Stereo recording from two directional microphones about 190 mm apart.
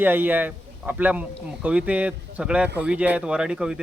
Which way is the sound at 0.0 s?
10° right (ahead or behind).